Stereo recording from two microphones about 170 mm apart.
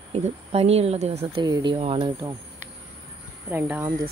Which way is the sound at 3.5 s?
10° right (ahead or behind).